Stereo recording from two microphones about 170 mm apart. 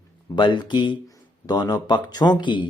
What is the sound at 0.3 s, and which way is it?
Speech, 30° left (ahead or behind).